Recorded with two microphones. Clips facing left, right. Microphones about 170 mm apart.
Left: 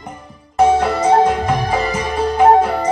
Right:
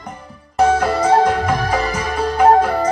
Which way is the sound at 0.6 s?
20° left (ahead or behind).